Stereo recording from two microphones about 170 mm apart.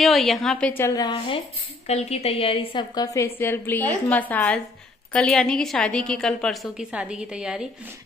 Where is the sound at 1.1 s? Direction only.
35° left (ahead or behind).